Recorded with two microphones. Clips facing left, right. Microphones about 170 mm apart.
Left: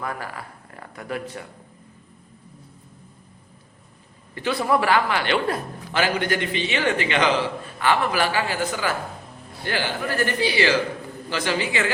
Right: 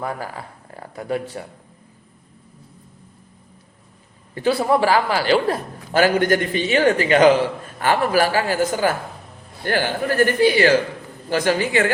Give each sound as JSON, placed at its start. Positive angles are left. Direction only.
{"t": 0.0, "sound": "speech", "side_deg": -30}
{"t": 4.4, "sound": "a man's voice", "side_deg": -35}